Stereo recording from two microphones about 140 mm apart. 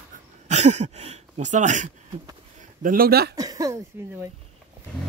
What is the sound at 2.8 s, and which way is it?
Speech, 90° right.